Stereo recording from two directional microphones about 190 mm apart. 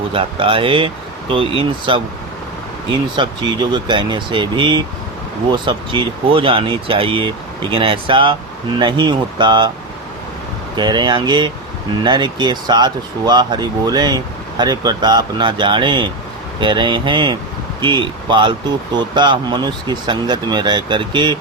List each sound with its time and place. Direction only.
0.1 s speech: 30° right (ahead or behind)
3.2 s speech: 25° right (ahead or behind)
10.8 s speech: 25° right (ahead or behind)